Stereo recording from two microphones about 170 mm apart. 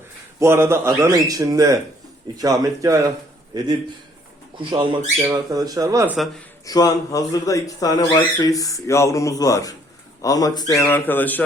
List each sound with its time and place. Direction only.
0.3 s speech: 15° right (ahead or behind)
4.7 s speech: 30° right (ahead or behind)
6.7 s a man's voice: 20° left (ahead or behind)